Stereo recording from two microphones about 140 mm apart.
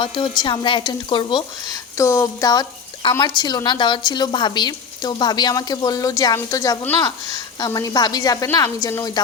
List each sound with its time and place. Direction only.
0.0 s a woman's voice: 35° left (ahead or behind)